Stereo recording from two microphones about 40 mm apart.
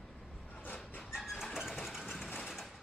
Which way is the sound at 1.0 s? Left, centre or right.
Centre.